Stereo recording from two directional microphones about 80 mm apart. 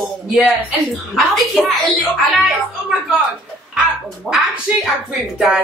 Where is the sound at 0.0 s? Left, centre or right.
Centre.